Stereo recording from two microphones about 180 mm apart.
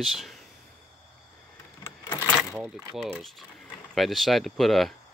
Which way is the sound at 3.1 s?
Centre (ahead or behind).